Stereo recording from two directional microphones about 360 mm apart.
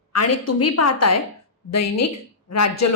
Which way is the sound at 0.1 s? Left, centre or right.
Left.